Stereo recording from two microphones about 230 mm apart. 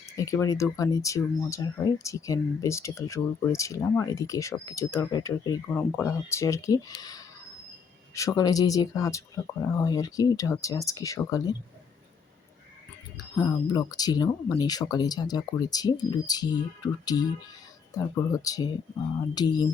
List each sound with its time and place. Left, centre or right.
0.2 s speech: centre
13.1 s speech: centre